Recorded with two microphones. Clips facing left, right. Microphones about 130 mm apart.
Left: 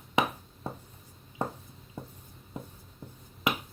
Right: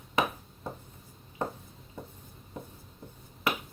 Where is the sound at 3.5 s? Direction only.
15° left (ahead or behind).